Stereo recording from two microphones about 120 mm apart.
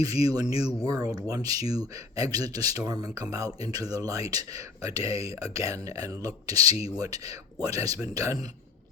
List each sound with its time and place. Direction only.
0.0 s speech: 30° right (ahead or behind)